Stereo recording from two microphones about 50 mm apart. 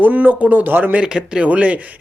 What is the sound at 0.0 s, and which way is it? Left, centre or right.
Speech, right.